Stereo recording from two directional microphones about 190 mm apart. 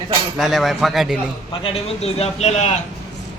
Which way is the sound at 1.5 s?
30° left (ahead or behind).